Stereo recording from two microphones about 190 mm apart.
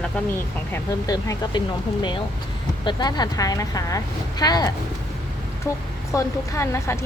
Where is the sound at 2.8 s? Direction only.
20° left (ahead or behind).